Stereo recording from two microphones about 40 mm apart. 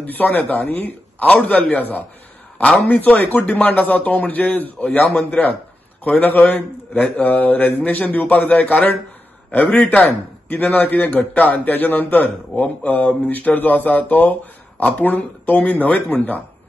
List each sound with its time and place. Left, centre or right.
0.0 s a man's voice: left
1.3 s a man's voice: left
2.6 s a man's voice: left
2.9 s a man's voice: left
6.0 s a man's voice: left
9.9 s a man's voice: left